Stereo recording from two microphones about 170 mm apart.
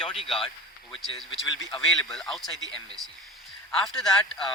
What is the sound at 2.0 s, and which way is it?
Speech, centre (ahead or behind).